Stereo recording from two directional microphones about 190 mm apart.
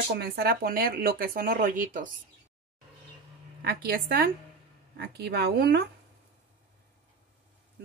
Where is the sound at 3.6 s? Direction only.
55° right (ahead or behind).